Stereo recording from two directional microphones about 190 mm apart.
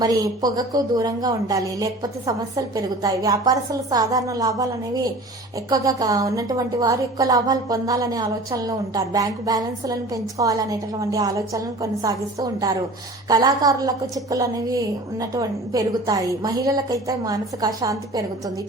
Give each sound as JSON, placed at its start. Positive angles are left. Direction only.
{"t": 0.0, "sound": "a woman's voice", "side_deg": -20}